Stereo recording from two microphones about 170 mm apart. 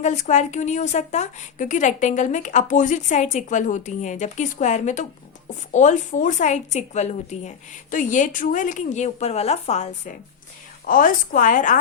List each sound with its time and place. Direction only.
0.0 s a woman's voice: 45° left (ahead or behind)
10.8 s a woman's voice: 55° left (ahead or behind)